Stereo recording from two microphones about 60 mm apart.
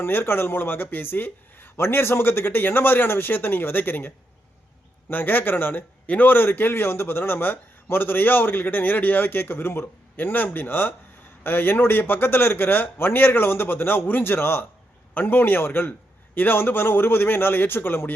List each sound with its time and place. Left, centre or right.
0.0 s speech: left